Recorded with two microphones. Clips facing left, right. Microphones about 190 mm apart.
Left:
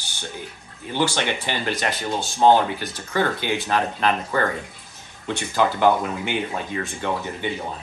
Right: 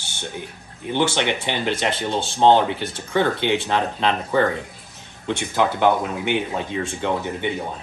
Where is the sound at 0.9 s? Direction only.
20° right (ahead or behind).